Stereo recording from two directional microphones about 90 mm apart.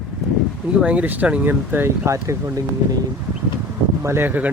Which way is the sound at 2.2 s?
35° right (ahead or behind).